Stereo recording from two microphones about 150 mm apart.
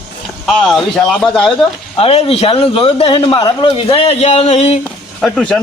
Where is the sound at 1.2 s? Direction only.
5° left (ahead or behind).